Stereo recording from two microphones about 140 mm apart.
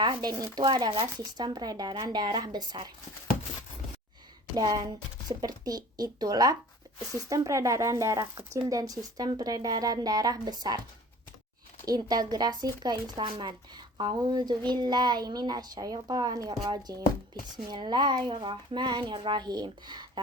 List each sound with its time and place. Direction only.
0.0 s speech: 30° right (ahead or behind)
4.5 s speech: 30° right (ahead or behind)
11.9 s speech: 30° right (ahead or behind)